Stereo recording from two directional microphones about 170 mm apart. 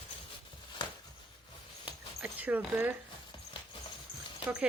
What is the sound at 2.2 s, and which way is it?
Speech, 10° right (ahead or behind).